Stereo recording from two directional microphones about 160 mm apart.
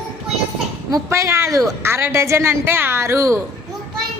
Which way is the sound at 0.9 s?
20° right (ahead or behind).